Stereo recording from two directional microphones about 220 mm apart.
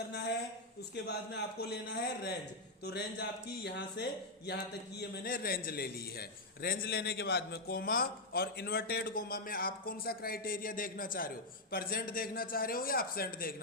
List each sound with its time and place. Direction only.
0.1 s a woman's voice: 50° left (ahead or behind)
2.8 s a man's voice: 50° left (ahead or behind)